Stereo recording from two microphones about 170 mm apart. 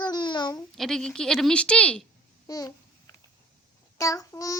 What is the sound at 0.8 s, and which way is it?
A woman's voice, 5° left (ahead or behind).